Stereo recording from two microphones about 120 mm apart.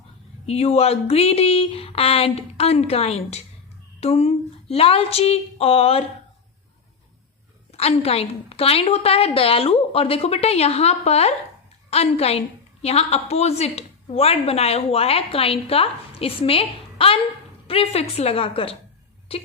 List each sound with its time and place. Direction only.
0.4 s a woman's voice: 60° left (ahead or behind)
7.7 s a woman's voice: 55° left (ahead or behind)